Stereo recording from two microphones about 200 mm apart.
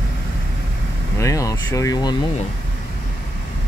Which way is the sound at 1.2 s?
15° left (ahead or behind).